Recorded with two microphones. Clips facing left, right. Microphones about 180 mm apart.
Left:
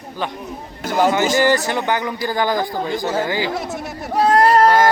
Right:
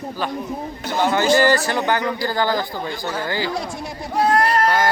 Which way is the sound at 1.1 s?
20° left (ahead or behind).